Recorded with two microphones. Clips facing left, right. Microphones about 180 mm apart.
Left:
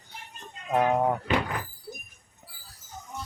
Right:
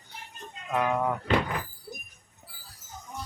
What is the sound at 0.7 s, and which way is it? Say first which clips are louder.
Speech: left 3 dB; 35° left (ahead or behind).